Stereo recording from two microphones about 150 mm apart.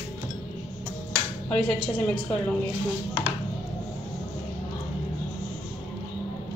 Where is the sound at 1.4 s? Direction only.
5° left (ahead or behind).